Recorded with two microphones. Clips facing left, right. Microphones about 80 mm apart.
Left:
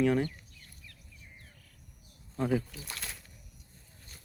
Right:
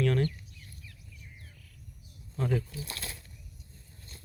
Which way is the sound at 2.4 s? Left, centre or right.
Centre.